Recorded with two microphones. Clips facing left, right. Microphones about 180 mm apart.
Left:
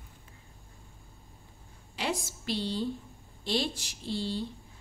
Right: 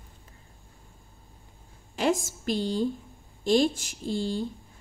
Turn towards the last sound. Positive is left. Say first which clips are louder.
# right 4 dB
turn(degrees=-45)  # may be behind; listen again after turning